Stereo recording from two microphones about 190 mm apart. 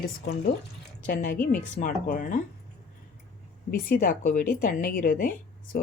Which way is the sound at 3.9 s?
45° left (ahead or behind).